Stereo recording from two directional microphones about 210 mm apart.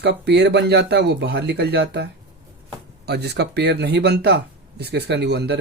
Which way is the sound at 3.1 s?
50° right (ahead or behind).